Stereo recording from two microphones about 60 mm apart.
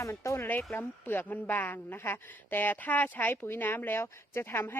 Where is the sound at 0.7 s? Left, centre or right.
Left.